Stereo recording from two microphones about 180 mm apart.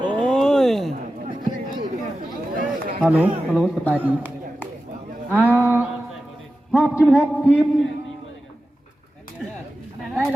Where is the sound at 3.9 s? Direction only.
10° right (ahead or behind).